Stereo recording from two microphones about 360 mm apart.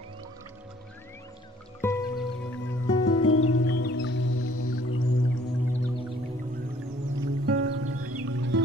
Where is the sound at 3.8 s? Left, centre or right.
Left.